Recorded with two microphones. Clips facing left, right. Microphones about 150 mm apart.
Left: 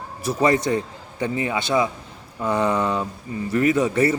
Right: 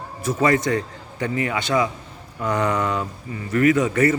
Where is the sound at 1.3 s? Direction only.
25° left (ahead or behind).